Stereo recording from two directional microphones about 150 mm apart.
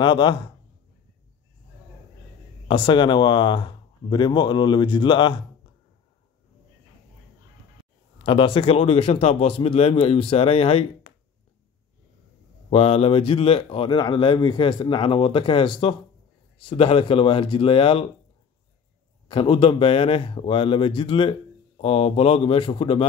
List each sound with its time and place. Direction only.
0.0 s a man's voice: 30° left (ahead or behind)
2.7 s a man's voice: 30° left (ahead or behind)
8.2 s a man's voice: 35° left (ahead or behind)
12.6 s a man's voice: 40° left (ahead or behind)
19.2 s a man's voice: 35° left (ahead or behind)